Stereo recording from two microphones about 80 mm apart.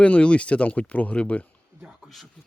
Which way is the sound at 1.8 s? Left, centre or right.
Centre.